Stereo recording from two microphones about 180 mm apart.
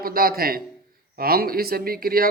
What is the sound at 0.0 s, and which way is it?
Speech, 55° right (ahead or behind).